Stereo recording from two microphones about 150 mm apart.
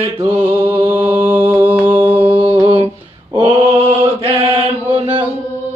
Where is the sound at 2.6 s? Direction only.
35° right (ahead or behind).